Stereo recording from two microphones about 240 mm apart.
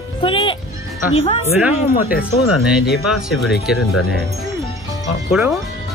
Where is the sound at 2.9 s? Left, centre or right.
Centre.